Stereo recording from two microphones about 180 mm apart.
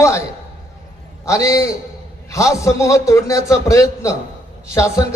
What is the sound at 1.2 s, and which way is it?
A man's voice, 15° left (ahead or behind).